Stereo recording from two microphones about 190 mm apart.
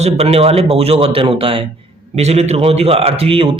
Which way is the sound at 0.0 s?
30° right (ahead or behind).